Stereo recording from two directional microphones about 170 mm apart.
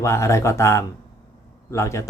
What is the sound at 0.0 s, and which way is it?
Speech, 15° left (ahead or behind).